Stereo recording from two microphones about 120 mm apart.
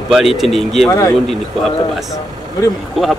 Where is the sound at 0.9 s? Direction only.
25° left (ahead or behind).